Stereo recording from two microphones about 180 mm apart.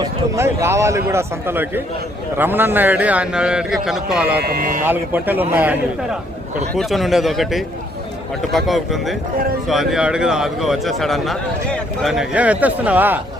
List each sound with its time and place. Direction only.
0.0 s a man's voice: 15° right (ahead or behind)
4.4 s speech: 55° right (ahead or behind)
4.9 s a man's voice: 10° right (ahead or behind)
6.7 s speech: centre (ahead or behind)